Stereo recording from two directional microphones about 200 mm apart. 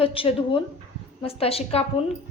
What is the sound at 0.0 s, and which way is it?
A woman's voice, 25° left (ahead or behind).